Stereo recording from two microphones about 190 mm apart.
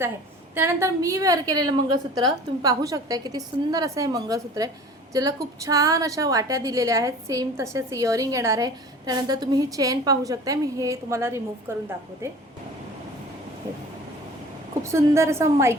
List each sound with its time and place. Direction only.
0.5 s a woman's voice: 15° right (ahead or behind)
14.9 s a woman's voice: 15° right (ahead or behind)